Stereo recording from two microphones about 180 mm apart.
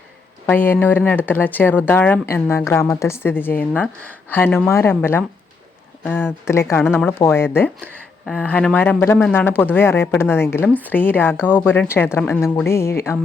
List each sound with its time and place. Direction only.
0.4 s speech: 10° left (ahead or behind)